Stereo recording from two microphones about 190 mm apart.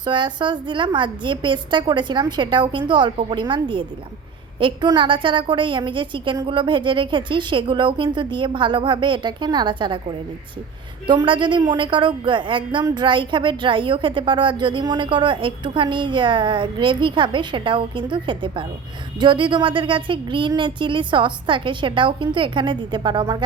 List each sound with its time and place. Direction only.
0.0 s a woman's voice: 25° right (ahead or behind)
11.0 s a woman's voice: 25° right (ahead or behind)